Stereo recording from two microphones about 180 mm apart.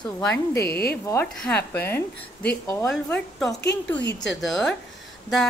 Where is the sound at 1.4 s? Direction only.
10° left (ahead or behind).